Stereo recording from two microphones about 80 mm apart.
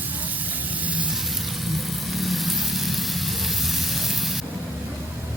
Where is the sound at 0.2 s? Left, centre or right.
Right.